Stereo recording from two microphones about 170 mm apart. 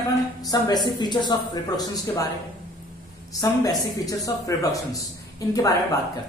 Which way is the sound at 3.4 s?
20° left (ahead or behind).